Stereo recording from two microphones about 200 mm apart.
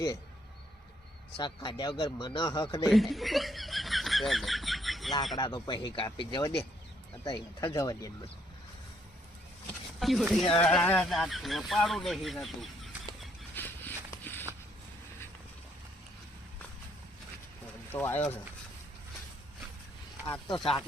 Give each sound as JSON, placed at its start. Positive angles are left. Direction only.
{"t": 1.4, "sound": "speech", "side_deg": 20}
{"t": 2.8, "sound": "snicker", "side_deg": 0}
{"t": 5.4, "sound": "speech", "side_deg": 20}
{"t": 10.0, "sound": "speech", "side_deg": 0}
{"t": 13.6, "sound": "a sound", "side_deg": 10}
{"t": 17.9, "sound": "speech", "side_deg": 10}
{"t": 20.6, "sound": "speech", "side_deg": 20}